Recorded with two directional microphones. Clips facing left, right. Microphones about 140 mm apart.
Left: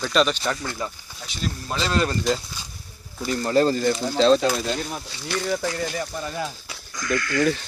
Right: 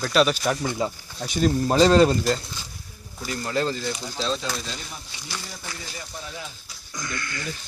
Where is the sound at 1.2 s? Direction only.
45° right (ahead or behind).